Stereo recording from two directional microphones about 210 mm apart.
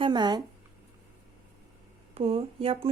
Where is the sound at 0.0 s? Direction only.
20° right (ahead or behind).